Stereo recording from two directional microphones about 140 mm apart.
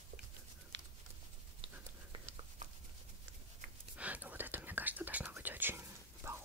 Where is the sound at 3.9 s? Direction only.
10° right (ahead or behind).